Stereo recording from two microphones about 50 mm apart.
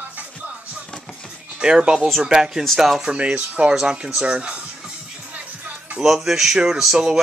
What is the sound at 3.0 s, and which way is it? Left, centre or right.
Speech, right.